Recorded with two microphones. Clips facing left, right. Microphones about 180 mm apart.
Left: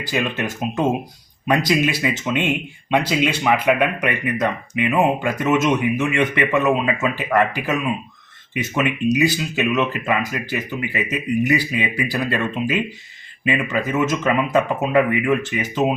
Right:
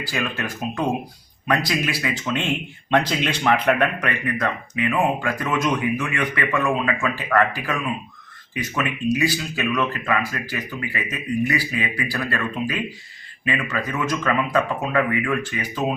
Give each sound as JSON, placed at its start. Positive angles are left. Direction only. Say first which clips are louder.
{"t": 0.0, "sound": "speech", "louder": "left 4 dB", "side_deg": 20}